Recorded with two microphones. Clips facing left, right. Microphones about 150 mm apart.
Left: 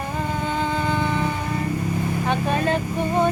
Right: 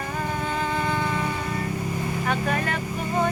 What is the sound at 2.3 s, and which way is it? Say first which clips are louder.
Vehicle: left 4 dB; 25° left (ahead or behind).